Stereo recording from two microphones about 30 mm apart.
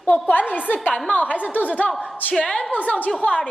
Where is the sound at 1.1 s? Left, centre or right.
Left.